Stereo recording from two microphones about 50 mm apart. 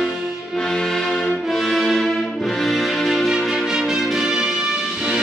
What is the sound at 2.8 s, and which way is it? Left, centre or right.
Music, centre.